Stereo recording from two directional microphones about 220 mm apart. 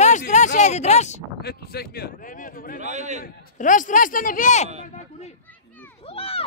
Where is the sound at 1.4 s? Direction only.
45° left (ahead or behind).